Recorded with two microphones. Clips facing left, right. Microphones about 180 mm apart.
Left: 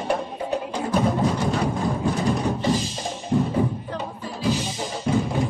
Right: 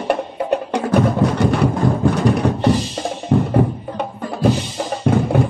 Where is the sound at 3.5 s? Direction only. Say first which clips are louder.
Right 6 dB; 65° right (ahead or behind).